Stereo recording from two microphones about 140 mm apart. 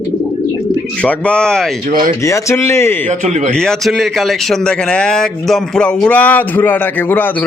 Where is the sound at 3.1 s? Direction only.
55° right (ahead or behind).